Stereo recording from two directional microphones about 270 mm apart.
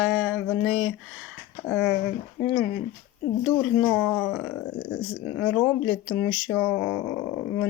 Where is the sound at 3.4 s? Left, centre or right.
Centre.